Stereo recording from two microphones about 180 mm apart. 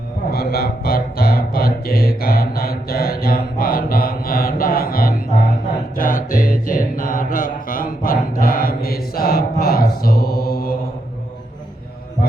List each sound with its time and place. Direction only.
0.3 s music: 60° left (ahead or behind)
6.0 s mantra: 50° left (ahead or behind)